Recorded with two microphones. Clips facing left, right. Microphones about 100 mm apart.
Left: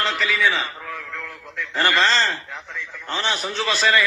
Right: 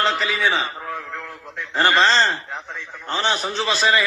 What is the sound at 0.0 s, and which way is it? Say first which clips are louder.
A man's voice: right 1 dB; 25° right (ahead or behind).